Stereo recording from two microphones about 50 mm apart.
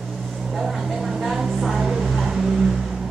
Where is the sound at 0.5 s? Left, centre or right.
Centre.